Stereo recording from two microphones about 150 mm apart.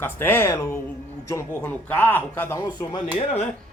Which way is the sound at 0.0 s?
15° left (ahead or behind).